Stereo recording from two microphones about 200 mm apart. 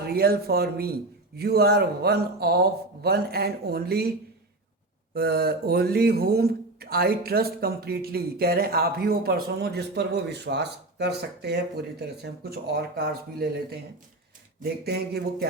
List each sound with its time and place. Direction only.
0.0 s speech: 50° right (ahead or behind)
5.1 s speech: 50° right (ahead or behind)